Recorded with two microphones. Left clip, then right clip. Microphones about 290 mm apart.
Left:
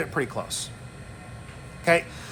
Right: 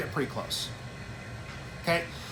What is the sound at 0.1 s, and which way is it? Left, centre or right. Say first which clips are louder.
Speech: left 4 dB; left.